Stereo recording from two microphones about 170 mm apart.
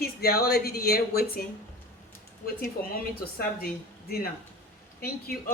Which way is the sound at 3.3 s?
65° left (ahead or behind).